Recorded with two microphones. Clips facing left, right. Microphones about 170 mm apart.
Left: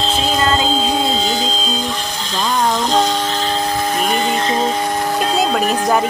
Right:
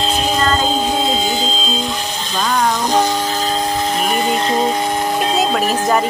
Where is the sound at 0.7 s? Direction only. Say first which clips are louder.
Even; 15° right (ahead or behind).